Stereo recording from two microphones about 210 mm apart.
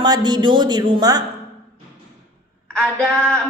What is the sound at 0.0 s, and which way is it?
A man's voice, 20° right (ahead or behind).